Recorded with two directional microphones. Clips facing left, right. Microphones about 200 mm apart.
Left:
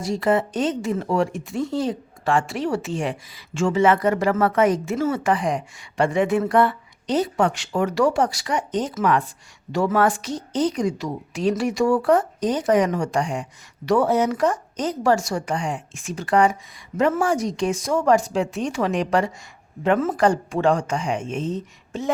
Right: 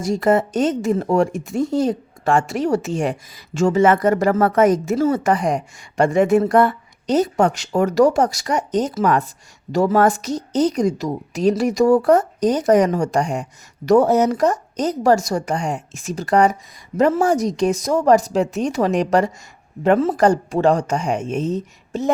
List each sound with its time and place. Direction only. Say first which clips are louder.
0.0 s a woman's voice: right 4 dB; 45° right (ahead or behind)